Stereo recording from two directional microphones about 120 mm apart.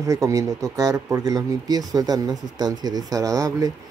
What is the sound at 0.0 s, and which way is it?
Speech, 25° right (ahead or behind).